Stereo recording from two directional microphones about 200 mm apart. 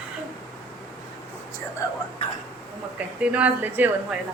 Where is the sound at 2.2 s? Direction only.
30° left (ahead or behind).